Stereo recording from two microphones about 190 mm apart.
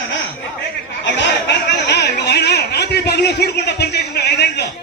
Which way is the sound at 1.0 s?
65° left (ahead or behind).